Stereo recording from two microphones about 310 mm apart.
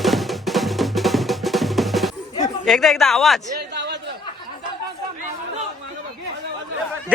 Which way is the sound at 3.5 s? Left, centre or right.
Right.